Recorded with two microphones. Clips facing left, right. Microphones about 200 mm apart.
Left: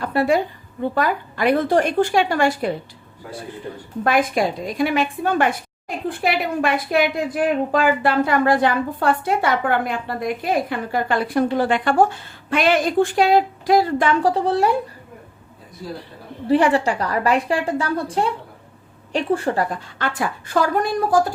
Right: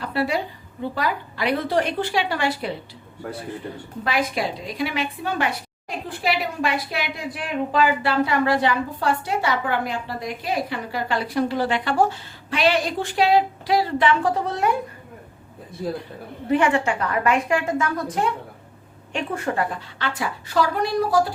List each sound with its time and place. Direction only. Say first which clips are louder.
0.0 s a woman's voice: left 5 dB; 50° left (ahead or behind)
4.0 s a woman's voice: left 5 dB; 50° left (ahead or behind); by 14.8 s 30° left (ahead or behind)
16.5 s a woman's voice: left 3 dB; 35° left (ahead or behind)
19.8 s a woman's voice: left 3 dB; 50° left (ahead or behind)